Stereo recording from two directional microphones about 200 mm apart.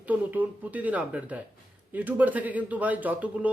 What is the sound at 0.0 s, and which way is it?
Speech, 10° right (ahead or behind).